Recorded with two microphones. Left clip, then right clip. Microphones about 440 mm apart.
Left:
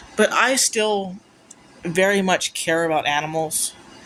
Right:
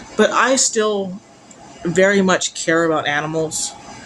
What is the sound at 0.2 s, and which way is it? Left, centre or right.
Speech, left.